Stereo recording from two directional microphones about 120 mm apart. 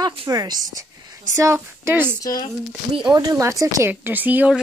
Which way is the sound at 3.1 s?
30° right (ahead or behind).